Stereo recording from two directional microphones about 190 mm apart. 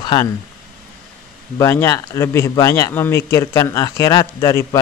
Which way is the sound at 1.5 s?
15° left (ahead or behind).